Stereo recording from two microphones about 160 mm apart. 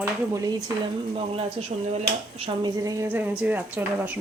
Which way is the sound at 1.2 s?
40° right (ahead or behind).